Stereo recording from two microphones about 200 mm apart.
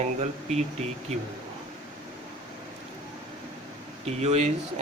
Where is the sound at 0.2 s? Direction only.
30° right (ahead or behind).